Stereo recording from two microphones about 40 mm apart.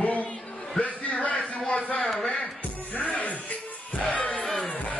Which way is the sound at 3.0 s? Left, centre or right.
Left.